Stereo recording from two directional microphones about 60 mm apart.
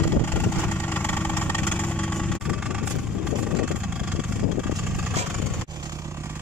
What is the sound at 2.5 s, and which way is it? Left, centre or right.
Vehicle, centre.